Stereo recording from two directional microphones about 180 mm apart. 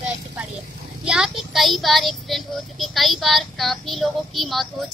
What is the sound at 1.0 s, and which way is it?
A child's voice, 5° right (ahead or behind).